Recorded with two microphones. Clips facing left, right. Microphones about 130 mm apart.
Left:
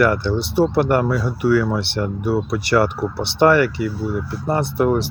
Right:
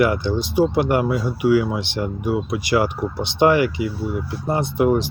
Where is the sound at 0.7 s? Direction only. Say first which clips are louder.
Left 2 dB; 50° left (ahead or behind).